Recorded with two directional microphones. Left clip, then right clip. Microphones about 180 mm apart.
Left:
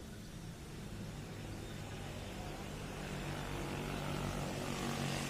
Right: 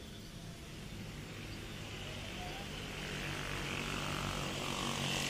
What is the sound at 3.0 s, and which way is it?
Vehicle, 50° left (ahead or behind).